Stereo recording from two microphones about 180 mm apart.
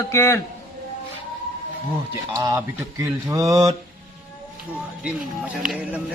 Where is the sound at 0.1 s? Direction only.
15° left (ahead or behind).